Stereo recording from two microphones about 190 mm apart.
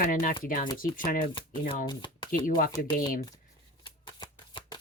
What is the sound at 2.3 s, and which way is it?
Speech, 45° left (ahead or behind).